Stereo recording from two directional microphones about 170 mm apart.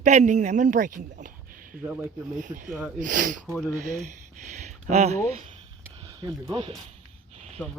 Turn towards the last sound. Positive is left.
turn(degrees=10)  # may be behind; listen again after turning